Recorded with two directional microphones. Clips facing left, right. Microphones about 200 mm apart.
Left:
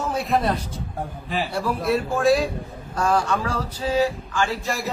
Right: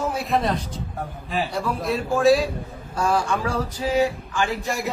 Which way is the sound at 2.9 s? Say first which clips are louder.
Left 1 dB; 10° right (ahead or behind).